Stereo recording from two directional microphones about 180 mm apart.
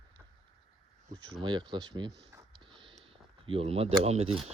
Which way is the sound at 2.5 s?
30° right (ahead or behind).